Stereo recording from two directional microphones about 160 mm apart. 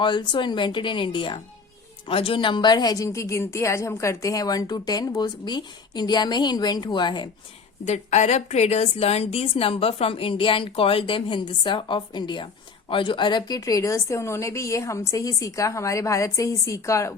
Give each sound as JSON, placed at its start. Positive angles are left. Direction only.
{"t": 0.0, "sound": "a woman's voice", "side_deg": 30}
{"t": 7.9, "sound": "a woman's voice", "side_deg": 45}